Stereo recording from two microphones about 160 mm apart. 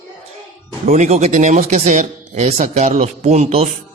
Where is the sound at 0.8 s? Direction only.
45° right (ahead or behind).